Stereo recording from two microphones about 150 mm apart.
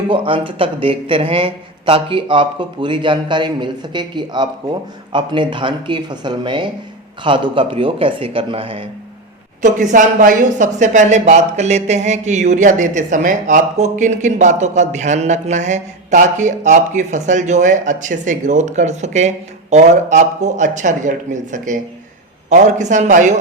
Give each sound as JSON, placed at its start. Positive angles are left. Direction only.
{"t": 0.1, "sound": "speech", "side_deg": -35}
{"t": 9.6, "sound": "a man's voice", "side_deg": -55}